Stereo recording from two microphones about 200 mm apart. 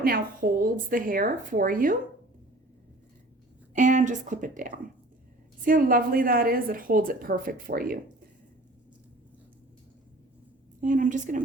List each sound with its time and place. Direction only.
0.0 s a woman's voice: 45° right (ahead or behind)
3.8 s a woman's voice: 40° right (ahead or behind)
10.8 s speech: 40° right (ahead or behind)